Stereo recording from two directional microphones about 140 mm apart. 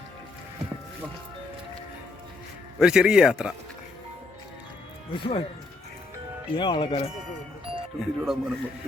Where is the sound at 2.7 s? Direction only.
5° right (ahead or behind).